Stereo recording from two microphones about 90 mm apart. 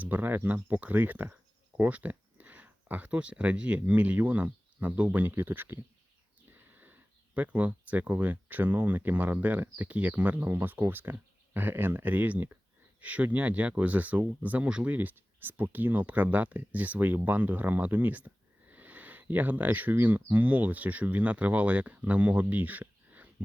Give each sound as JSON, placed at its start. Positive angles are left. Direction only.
{"t": 0.0, "sound": "speech", "side_deg": -20}